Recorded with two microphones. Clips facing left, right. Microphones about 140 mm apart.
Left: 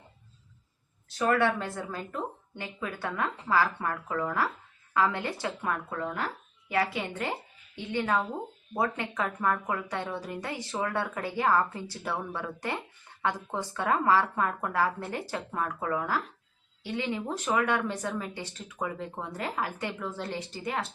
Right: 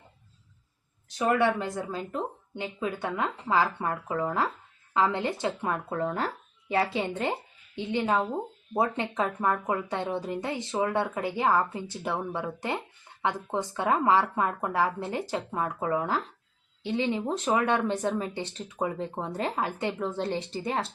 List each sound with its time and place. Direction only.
1.0 s speech: 15° right (ahead or behind)